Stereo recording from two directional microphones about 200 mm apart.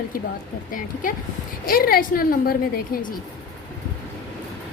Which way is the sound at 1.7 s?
45° left (ahead or behind).